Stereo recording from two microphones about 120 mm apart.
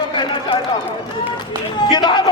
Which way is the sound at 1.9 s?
40° left (ahead or behind).